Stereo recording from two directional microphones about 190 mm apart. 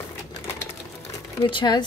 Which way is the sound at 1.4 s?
25° left (ahead or behind).